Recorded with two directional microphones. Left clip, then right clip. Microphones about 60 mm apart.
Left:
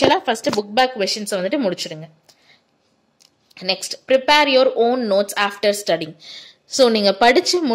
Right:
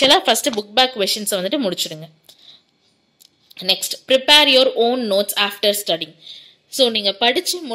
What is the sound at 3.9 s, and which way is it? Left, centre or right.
Speech, right.